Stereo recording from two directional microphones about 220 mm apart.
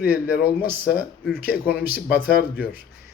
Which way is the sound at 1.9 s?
45° left (ahead or behind).